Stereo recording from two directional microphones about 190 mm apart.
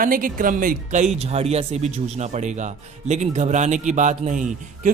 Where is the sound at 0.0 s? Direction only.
45° right (ahead or behind).